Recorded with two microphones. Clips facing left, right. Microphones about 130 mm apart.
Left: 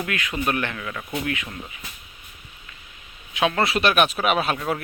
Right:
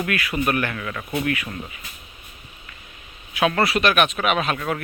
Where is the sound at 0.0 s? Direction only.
20° left (ahead or behind).